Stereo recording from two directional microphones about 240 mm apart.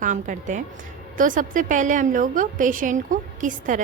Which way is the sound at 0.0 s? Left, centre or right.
Right.